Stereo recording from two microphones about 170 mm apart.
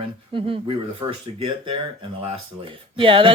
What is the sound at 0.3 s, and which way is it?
Speech, 30° right (ahead or behind).